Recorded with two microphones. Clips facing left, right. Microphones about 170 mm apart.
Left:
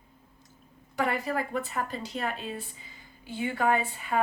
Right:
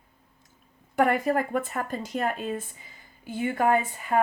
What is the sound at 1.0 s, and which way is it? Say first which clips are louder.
Speech: right 6 dB; 50° right (ahead or behind).